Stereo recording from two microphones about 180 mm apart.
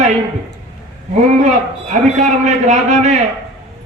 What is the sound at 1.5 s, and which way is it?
A man's voice, 40° right (ahead or behind).